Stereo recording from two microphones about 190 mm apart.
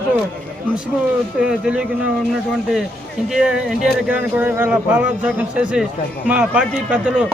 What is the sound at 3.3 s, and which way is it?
Speech, 5° right (ahead or behind).